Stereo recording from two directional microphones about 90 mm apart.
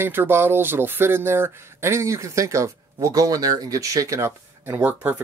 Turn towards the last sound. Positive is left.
turn(degrees=-25)  # may be behind; listen again after turning